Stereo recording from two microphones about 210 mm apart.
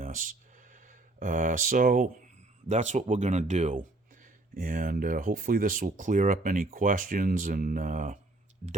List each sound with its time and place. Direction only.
0.0 s speech: 40° right (ahead or behind)